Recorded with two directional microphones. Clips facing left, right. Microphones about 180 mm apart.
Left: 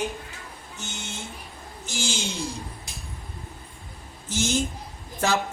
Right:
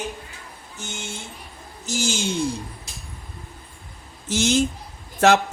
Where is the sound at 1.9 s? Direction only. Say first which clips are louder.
Right 6 dB; 40° right (ahead or behind).